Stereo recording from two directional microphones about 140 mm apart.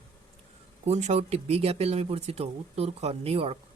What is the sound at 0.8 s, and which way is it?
Speech, 55° right (ahead or behind).